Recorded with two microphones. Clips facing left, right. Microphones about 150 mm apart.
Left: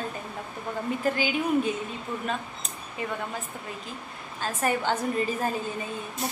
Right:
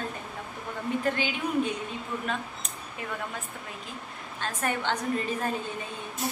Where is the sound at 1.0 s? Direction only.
5° left (ahead or behind).